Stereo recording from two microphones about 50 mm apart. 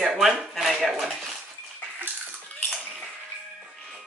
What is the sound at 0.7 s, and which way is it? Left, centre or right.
Dishes, centre.